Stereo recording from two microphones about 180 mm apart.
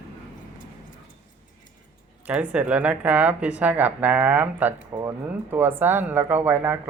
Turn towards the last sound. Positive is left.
turn(degrees=-10)  # may be behind; listen again after turning